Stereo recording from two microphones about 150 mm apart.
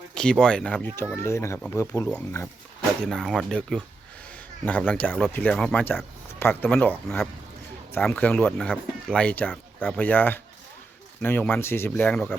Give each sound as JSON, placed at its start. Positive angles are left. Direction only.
{"t": 0.1, "sound": "speech", "side_deg": 5}
{"t": 8.4, "sound": "speech", "side_deg": 0}